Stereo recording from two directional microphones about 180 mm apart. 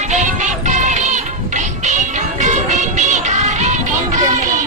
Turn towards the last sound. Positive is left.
turn(degrees=-40)  # may be behind; listen again after turning